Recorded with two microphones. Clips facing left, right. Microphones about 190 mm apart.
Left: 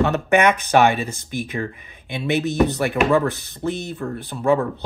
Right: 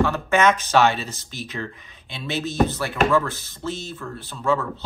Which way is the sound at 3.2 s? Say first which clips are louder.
Left 6 dB; 60° left (ahead or behind).